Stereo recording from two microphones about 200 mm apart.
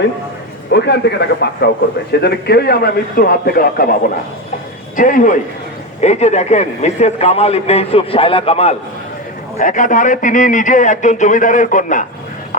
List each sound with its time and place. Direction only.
0.7 s a man's voice: 55° left (ahead or behind)
4.9 s a man's voice: 40° left (ahead or behind)
9.6 s a man's voice: 40° left (ahead or behind)